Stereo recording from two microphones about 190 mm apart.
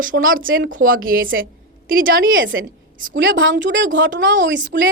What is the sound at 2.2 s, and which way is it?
A woman's voice, 90° right.